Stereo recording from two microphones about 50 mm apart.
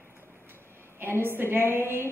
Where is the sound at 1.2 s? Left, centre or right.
Right.